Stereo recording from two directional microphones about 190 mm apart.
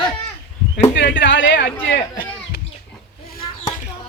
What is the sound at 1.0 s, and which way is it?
Music, 70° left (ahead or behind).